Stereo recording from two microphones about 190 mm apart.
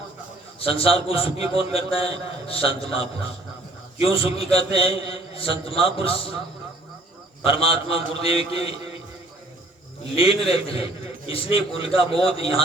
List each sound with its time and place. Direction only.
0.6 s a man's voice: 30° left (ahead or behind)
4.1 s a man's voice: 30° left (ahead or behind)
7.4 s a man's voice: 30° left (ahead or behind)
10.2 s a man's voice: 30° left (ahead or behind)